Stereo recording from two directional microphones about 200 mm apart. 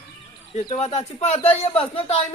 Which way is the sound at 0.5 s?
35° left (ahead or behind).